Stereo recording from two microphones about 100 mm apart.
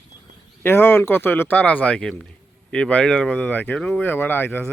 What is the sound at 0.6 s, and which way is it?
Speech, 20° left (ahead or behind).